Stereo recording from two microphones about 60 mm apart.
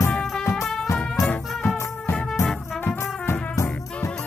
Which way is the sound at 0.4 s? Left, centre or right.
Left.